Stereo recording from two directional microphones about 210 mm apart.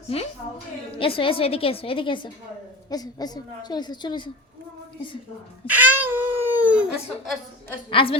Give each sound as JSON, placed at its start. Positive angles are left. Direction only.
{"t": 0.1, "sound": "a woman's voice", "side_deg": 30}
{"t": 5.6, "sound": "speech", "side_deg": -10}
{"t": 7.9, "sound": "a woman's voice", "side_deg": 25}